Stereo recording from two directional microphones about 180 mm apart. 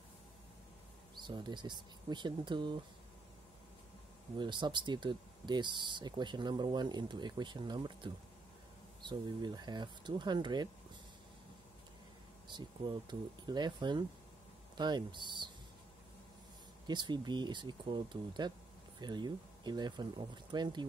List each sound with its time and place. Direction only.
1.1 s speech: 25° right (ahead or behind)
4.4 s speech: 25° right (ahead or behind)
12.4 s speech: 25° right (ahead or behind)
16.8 s speech: 25° right (ahead or behind)